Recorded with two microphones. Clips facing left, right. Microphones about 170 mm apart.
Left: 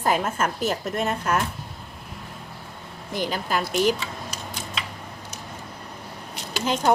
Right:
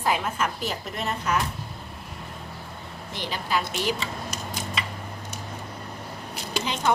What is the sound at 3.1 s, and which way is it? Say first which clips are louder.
Speech: left 3 dB; 45° left (ahead or behind).